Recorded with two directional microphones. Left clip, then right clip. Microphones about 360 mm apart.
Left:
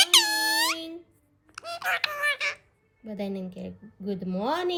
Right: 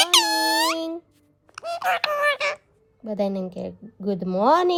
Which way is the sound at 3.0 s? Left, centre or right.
Centre.